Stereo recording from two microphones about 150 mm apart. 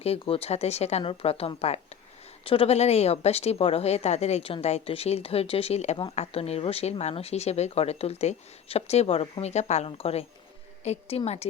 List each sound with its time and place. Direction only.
0.0 s speech: 40° left (ahead or behind)